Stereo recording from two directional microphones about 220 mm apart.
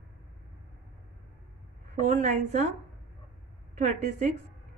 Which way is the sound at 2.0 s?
30° right (ahead or behind).